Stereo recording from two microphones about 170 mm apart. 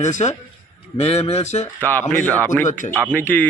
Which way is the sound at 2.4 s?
15° left (ahead or behind).